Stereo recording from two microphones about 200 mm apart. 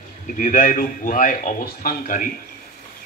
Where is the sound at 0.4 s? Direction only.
40° left (ahead or behind).